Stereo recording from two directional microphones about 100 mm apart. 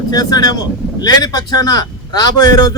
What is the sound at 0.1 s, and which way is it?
A man's voice, 40° left (ahead or behind).